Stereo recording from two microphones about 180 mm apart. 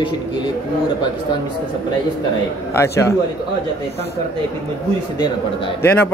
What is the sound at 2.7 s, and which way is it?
Speech, 15° left (ahead or behind).